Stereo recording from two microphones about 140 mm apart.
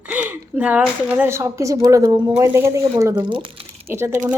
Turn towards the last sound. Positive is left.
turn(degrees=-15)  # may be behind; listen again after turning